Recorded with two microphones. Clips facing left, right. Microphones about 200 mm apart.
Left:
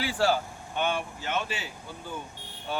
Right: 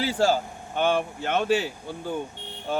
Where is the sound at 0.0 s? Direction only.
40° right (ahead or behind).